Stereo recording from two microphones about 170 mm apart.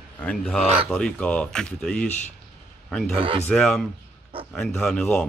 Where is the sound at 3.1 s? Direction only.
30° right (ahead or behind).